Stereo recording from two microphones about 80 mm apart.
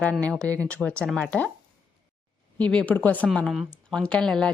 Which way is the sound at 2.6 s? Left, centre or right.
Centre.